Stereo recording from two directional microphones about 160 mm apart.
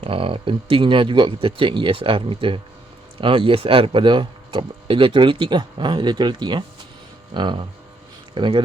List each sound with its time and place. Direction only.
0.0 s speech: 35° right (ahead or behind)